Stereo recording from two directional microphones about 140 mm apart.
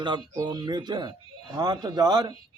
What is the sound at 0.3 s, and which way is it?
A man's voice, 30° right (ahead or behind).